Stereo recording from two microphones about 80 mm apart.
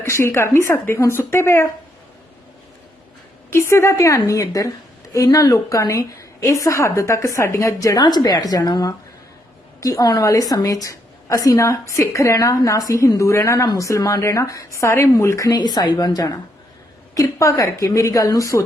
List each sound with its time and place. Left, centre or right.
0.0 s a woman's voice: left
3.5 s a woman's voice: left
15.5 s a woman's voice: left
17.3 s a woman's voice: left